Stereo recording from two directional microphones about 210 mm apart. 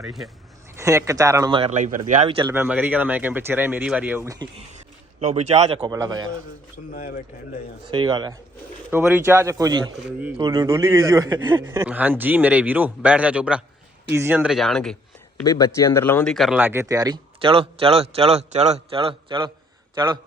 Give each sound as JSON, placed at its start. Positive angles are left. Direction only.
{"t": 0.0, "sound": "speech", "side_deg": 0}
{"t": 0.8, "sound": "speech", "side_deg": -15}
{"t": 2.4, "sound": "speech", "side_deg": -10}
{"t": 5.2, "sound": "speech", "side_deg": -30}
{"t": 5.8, "sound": "speech", "side_deg": -15}
{"t": 6.9, "sound": "a man's voice", "side_deg": 40}
{"t": 7.9, "sound": "speech", "side_deg": -20}
{"t": 10.3, "sound": "speech", "side_deg": -20}
{"t": 15.4, "sound": "speech", "side_deg": 15}